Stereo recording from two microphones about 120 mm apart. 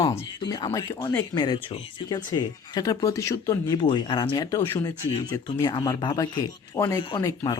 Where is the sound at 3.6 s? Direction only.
40° left (ahead or behind).